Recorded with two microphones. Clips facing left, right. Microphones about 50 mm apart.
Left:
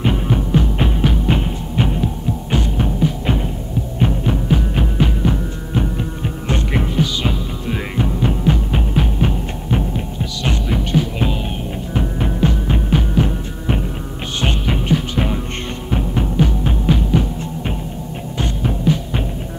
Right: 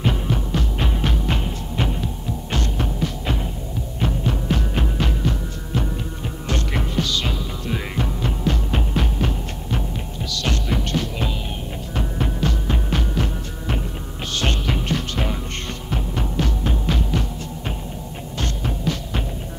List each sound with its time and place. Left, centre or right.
0.0 s music: centre
0.9 s music: centre